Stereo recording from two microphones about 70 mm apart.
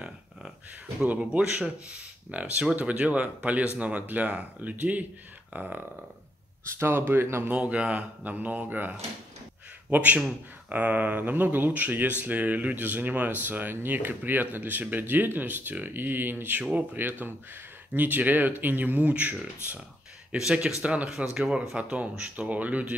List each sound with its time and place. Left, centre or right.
1.0 s speech: right
6.6 s speech: right
7.4 s speech: centre
20.2 s speech: centre
20.8 s speech: centre
21.2 s speech: centre
21.7 s speech: centre